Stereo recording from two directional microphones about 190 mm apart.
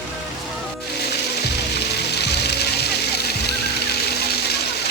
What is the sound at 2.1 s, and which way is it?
Music, 60° left (ahead or behind).